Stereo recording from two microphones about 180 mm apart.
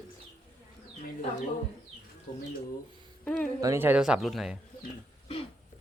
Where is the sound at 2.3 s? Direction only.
45° left (ahead or behind).